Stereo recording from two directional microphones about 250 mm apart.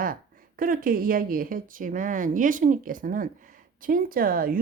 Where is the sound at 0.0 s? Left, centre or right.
Right.